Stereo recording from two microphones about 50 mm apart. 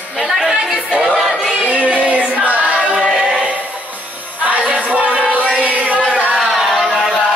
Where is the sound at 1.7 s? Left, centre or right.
Right.